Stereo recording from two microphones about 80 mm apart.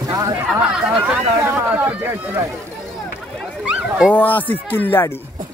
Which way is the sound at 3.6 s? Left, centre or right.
Centre.